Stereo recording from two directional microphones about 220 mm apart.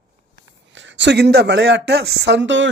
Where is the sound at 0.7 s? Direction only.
55° right (ahead or behind).